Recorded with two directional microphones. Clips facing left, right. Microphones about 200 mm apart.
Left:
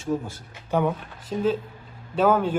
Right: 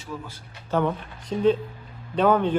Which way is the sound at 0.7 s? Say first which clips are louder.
Even; 10° left (ahead or behind).